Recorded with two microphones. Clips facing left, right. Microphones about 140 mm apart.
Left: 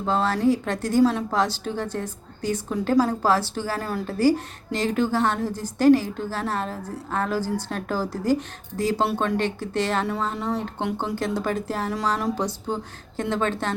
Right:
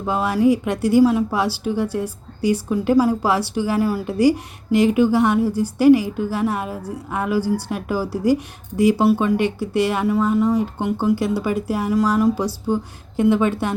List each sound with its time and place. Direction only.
0.0 s speech: 10° right (ahead or behind)